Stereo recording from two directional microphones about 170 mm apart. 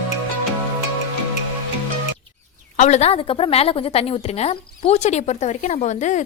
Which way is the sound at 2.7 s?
40° left (ahead or behind).